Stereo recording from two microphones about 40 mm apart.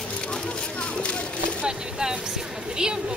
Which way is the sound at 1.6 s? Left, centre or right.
Centre.